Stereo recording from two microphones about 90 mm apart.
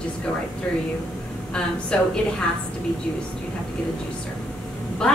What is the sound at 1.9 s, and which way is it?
Speech, 10° left (ahead or behind).